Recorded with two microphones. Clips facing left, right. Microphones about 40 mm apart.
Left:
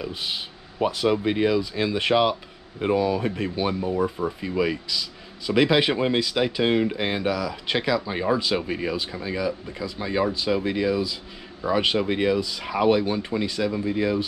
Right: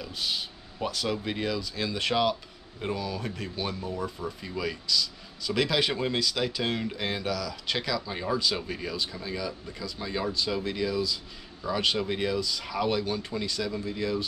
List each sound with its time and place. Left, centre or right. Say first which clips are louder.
0.0 s speech: left 3 dB; left